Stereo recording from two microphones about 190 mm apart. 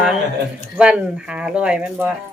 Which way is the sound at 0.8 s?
5° right (ahead or behind).